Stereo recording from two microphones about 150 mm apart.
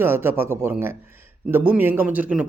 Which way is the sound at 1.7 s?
15° right (ahead or behind).